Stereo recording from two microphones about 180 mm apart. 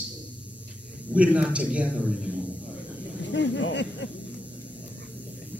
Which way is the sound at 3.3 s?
85° left.